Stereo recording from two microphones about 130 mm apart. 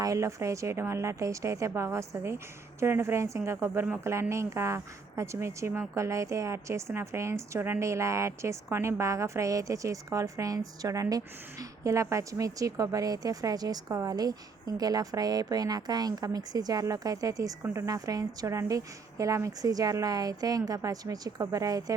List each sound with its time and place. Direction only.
0.0 s a woman's voice: 25° right (ahead or behind)